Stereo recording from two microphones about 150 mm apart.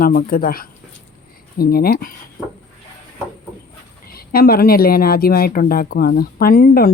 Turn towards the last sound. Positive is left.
turn(degrees=75)  # may be behind; listen again after turning